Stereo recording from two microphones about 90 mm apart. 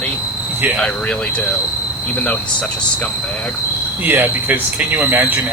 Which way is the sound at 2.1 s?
20° left (ahead or behind).